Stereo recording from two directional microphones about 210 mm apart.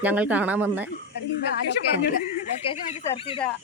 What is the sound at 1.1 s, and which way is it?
A woman's voice, 55° left (ahead or behind).